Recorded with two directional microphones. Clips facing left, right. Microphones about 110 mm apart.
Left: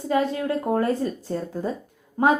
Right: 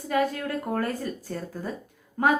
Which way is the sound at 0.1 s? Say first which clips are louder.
Left 3 dB; 25° left (ahead or behind).